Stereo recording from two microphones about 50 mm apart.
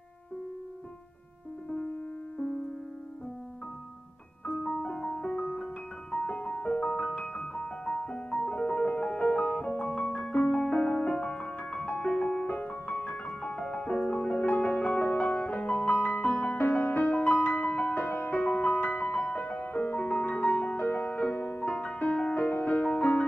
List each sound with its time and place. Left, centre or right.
4.5 s music: centre
6.1 s music: left
13.8 s music: centre
14.4 s music: left
16.5 s music: left
17.1 s music: left
19.6 s music: left
21.1 s music: left